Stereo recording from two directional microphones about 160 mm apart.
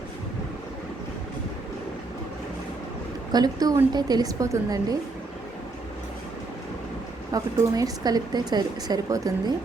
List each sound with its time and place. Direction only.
3.3 s speech: 25° right (ahead or behind)
7.3 s speech: 20° right (ahead or behind)